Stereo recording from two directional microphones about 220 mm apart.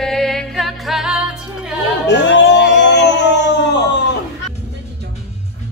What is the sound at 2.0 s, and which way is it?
Music, 55° left (ahead or behind).